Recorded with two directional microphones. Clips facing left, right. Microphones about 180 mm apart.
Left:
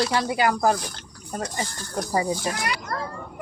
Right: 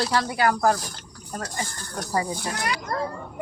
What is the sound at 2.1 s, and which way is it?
Speech, 20° left (ahead or behind).